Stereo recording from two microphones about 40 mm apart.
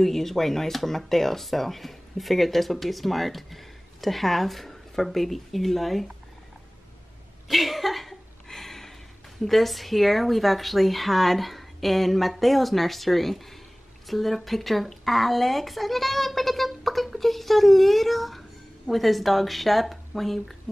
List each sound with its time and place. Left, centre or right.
0.0 s speech: centre
7.4 s a sound: centre
9.4 s a woman's voice: centre